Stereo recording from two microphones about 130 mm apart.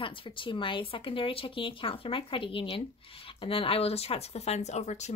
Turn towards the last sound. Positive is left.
turn(degrees=60)  # may be behind; listen again after turning